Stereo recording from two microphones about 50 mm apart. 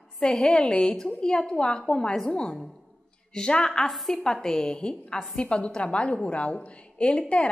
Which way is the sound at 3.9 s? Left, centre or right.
Centre.